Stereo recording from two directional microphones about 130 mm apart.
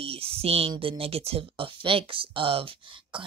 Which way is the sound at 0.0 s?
50° right (ahead or behind).